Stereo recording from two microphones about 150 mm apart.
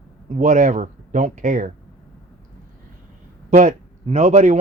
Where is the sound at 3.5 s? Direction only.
55° right (ahead or behind).